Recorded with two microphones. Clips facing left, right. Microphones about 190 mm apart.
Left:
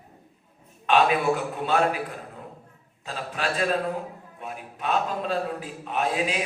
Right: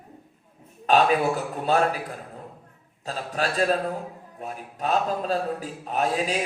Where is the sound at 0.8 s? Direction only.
40° right (ahead or behind).